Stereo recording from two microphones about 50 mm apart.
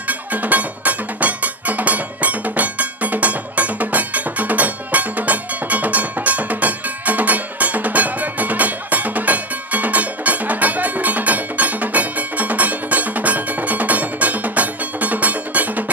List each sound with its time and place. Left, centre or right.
0.1 s music: right